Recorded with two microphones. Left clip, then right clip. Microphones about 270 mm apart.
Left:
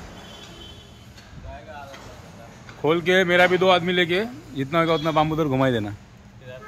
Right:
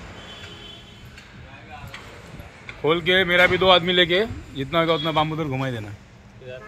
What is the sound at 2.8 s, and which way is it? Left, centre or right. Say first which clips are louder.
Speech: even; centre.